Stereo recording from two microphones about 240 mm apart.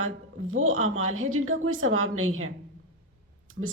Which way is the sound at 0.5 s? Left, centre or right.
Right.